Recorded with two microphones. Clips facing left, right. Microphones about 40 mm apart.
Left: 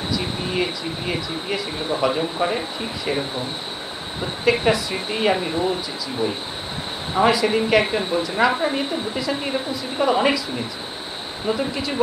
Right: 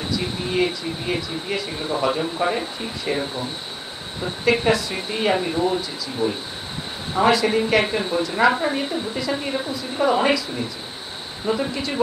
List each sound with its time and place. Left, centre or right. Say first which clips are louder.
1.0 s speech: even; centre
4.5 s a woman's voice: even; centre
6.2 s speech: right 1 dB; left
7.2 s a woman's voice: even; centre
11.4 s a woman's voice: even; centre